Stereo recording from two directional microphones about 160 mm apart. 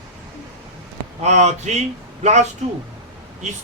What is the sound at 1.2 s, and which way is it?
A man's voice, 45° right (ahead or behind).